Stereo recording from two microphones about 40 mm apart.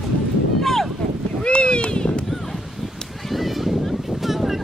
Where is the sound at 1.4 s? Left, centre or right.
Left.